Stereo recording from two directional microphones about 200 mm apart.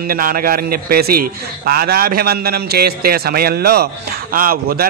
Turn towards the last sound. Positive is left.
turn(degrees=-50)  # may be behind; listen again after turning